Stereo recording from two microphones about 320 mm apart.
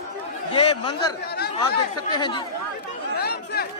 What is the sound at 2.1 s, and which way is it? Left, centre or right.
Speech, centre.